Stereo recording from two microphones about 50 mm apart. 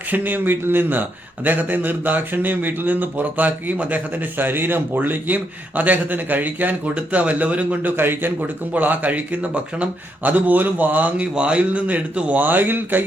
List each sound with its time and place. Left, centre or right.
0.1 s speech: right
7.9 s speech: right
11.3 s speech: right